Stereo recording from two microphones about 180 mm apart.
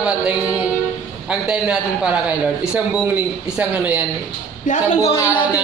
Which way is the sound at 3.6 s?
10° right (ahead or behind).